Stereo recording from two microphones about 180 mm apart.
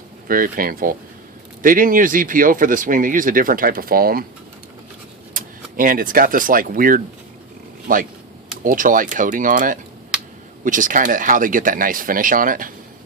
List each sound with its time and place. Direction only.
0.3 s speech: 50° right (ahead or behind)
5.4 s a sound: 50° right (ahead or behind)
5.7 s speech: 50° right (ahead or behind)